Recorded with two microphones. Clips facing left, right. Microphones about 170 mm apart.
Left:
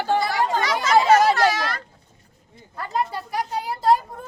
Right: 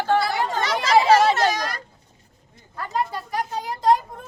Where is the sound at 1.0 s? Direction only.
30° right (ahead or behind).